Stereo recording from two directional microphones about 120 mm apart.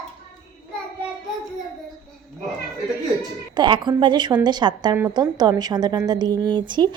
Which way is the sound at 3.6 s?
40° right (ahead or behind).